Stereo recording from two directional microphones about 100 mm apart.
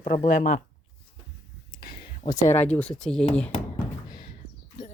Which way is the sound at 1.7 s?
55° left (ahead or behind).